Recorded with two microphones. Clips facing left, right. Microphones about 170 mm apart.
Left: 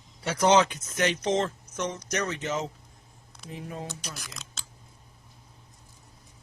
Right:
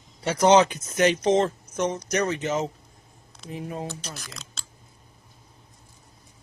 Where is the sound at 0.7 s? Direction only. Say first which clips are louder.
Right 6 dB; 40° right (ahead or behind).